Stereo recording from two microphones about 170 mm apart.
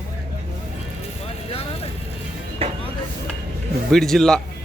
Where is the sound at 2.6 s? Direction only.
35° right (ahead or behind).